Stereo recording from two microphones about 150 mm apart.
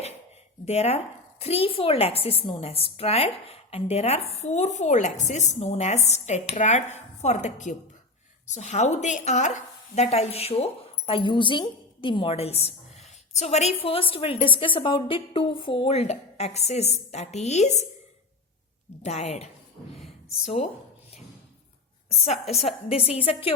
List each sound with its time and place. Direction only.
0.6 s a woman's voice: 45° left (ahead or behind)
19.0 s a woman's voice: 50° left (ahead or behind)
22.2 s a woman's voice: 45° left (ahead or behind)